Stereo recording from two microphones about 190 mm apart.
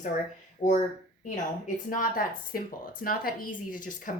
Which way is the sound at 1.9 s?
45° left (ahead or behind).